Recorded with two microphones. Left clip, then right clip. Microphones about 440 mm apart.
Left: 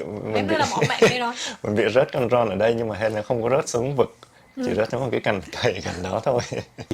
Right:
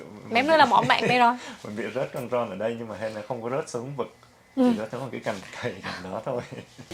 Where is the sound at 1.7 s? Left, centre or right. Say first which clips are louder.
Left 11 dB; left.